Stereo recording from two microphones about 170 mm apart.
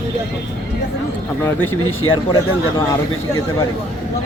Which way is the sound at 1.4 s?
15° left (ahead or behind).